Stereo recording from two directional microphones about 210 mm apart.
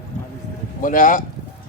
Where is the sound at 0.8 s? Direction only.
40° left (ahead or behind).